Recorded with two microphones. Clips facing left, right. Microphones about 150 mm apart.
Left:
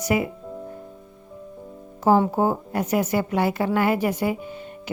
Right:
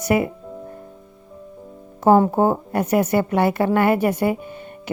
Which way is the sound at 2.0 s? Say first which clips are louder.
Right 4 dB; 55° right (ahead or behind).